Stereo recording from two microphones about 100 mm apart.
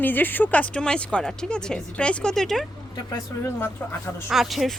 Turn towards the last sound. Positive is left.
turn(degrees=0)  # may be behind; listen again after turning